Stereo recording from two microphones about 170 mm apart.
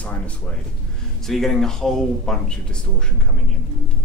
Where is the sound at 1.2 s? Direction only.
Centre (ahead or behind).